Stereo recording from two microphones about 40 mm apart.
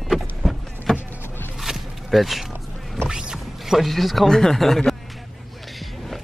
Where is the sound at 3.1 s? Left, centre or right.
Centre.